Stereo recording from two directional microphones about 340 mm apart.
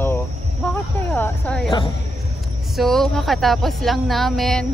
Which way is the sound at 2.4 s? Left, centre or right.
Centre.